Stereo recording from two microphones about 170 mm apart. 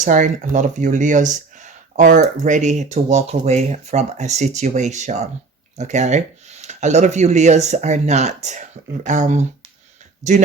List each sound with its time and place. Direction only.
0.0 s speech: 50° right (ahead or behind)